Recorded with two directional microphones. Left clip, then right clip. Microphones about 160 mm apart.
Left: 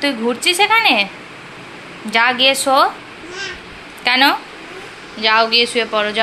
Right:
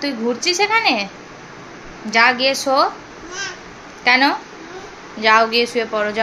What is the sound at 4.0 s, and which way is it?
Speech, centre (ahead or behind).